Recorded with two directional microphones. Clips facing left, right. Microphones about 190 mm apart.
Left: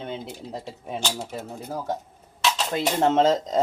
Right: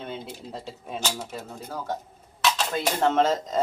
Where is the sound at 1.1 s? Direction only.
25° left (ahead or behind).